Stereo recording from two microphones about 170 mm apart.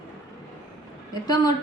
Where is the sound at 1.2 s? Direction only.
25° left (ahead or behind).